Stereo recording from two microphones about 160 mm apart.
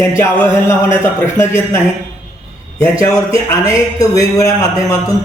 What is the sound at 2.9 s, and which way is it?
A man's voice, 20° left (ahead or behind).